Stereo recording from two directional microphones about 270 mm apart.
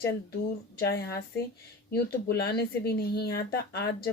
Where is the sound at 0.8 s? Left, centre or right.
Left.